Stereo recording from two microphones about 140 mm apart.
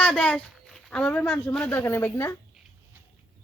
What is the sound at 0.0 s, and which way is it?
Speech, 10° left (ahead or behind).